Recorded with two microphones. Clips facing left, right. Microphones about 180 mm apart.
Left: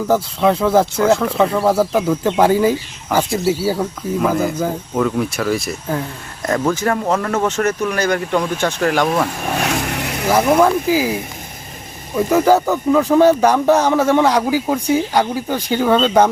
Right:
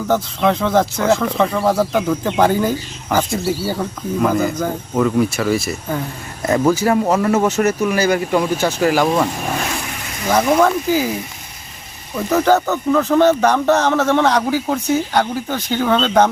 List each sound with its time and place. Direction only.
0.1 s speech: 5° left (ahead or behind)
9.6 s vehicle: 70° left (ahead or behind)
10.2 s speech: 5° left (ahead or behind)
12.1 s speech: 10° left (ahead or behind)